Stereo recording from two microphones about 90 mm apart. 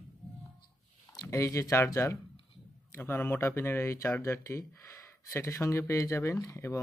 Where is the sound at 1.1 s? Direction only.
40° left (ahead or behind).